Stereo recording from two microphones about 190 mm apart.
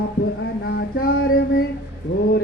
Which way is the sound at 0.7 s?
60° left (ahead or behind).